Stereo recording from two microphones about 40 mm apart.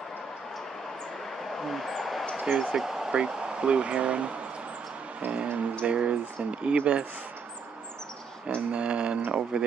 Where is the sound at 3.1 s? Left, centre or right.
Centre.